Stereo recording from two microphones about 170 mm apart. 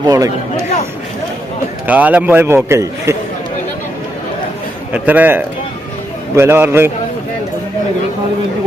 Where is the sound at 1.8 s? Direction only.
10° right (ahead or behind).